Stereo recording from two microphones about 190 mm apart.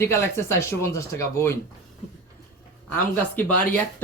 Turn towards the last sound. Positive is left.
turn(degrees=10)  # may be behind; listen again after turning